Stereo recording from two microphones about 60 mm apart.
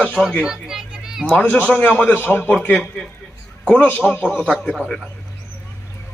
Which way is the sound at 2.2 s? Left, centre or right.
Left.